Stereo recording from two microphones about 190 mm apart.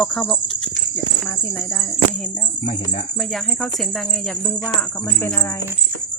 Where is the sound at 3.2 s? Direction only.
Centre (ahead or behind).